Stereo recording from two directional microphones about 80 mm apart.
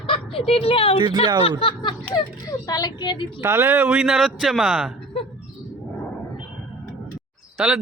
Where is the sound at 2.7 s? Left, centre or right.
Left.